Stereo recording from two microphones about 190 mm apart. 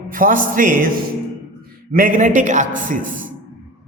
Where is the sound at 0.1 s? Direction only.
45° right (ahead or behind).